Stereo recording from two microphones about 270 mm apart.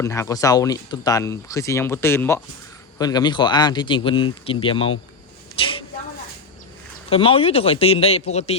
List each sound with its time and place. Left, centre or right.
0.0 s speech: centre
7.1 s speech: centre